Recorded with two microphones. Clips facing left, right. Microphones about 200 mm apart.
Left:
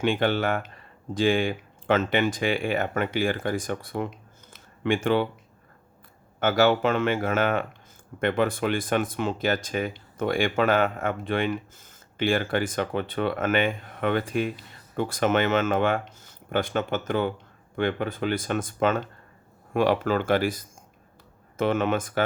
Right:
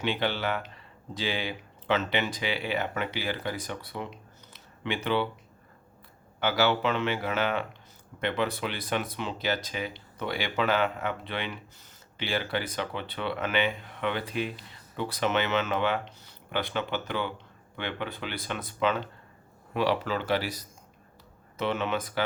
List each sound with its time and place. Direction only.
0.0 s speech: 50° left (ahead or behind)
4.5 s a sound: 50° left (ahead or behind)
6.4 s speech: 45° left (ahead or behind)